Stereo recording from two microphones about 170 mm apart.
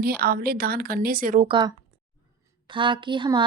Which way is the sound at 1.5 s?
25° right (ahead or behind).